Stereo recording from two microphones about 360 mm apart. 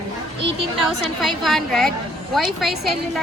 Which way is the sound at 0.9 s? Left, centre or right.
Centre.